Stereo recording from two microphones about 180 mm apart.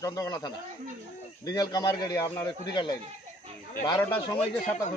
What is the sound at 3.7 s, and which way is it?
Speech, 15° left (ahead or behind).